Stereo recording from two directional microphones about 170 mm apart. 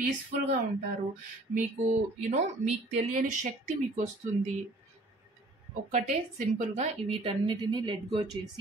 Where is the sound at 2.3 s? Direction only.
40° right (ahead or behind).